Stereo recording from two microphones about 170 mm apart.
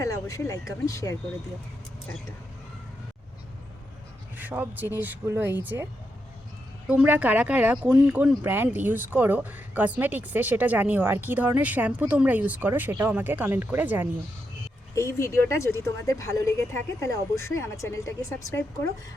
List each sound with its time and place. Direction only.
0.0 s speech: 20° left (ahead or behind)
4.4 s speech: 10° right (ahead or behind)
14.9 s speech: 15° left (ahead or behind)